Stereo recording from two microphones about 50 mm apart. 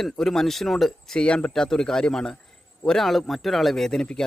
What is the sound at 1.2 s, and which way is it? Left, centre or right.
A man's voice, left.